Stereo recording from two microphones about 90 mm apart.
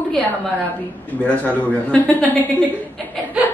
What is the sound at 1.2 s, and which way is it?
A woman's voice, 15° left (ahead or behind).